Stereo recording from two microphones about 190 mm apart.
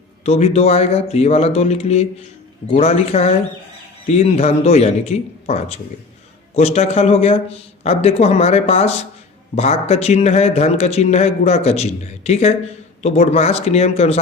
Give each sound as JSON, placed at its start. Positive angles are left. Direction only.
{"t": 0.3, "sound": "a man's voice", "side_deg": 35}